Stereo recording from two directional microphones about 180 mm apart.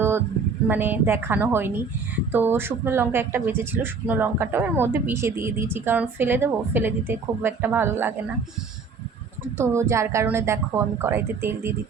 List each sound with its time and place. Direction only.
0.7 s speech: 10° right (ahead or behind)
9.6 s speech: 15° right (ahead or behind)